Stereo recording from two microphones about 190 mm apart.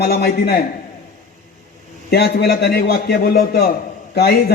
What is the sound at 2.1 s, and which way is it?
A man's voice, 55° left (ahead or behind).